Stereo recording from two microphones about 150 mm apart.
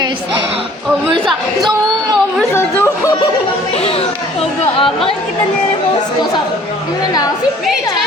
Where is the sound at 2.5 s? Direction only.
15° left (ahead or behind).